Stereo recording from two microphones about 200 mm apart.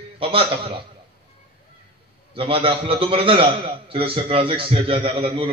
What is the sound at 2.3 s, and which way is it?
A man's voice, 25° right (ahead or behind).